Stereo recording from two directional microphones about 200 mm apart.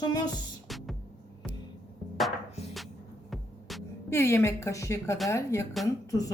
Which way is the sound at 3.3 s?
Centre (ahead or behind).